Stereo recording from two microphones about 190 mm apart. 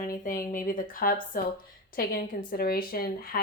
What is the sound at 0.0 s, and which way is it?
A woman's voice, 45° left (ahead or behind).